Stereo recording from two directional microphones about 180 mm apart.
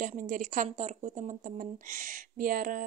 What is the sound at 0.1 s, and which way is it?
A woman's voice, 45° right (ahead or behind).